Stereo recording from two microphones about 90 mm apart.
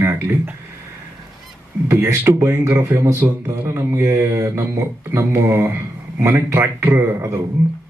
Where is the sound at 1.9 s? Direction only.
25° right (ahead or behind).